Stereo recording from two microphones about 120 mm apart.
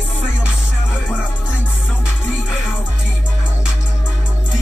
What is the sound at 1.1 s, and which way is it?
Music, 10° right (ahead or behind).